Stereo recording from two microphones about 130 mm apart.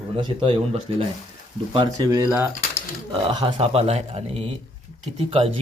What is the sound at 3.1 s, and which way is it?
Speech, 40° right (ahead or behind).